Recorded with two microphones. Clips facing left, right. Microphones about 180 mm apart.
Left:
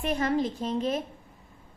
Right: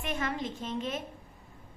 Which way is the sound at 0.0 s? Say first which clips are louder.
Left 7 dB; 40° left (ahead or behind).